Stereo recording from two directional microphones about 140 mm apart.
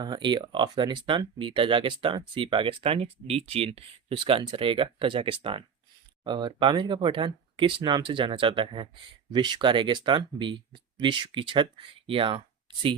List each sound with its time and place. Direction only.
0.0 s speech: 30° right (ahead or behind)